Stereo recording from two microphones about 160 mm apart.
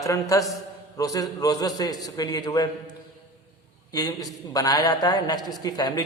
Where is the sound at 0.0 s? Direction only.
20° left (ahead or behind).